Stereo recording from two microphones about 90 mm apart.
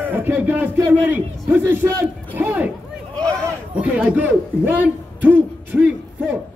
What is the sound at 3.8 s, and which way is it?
A man's voice, 15° right (ahead or behind).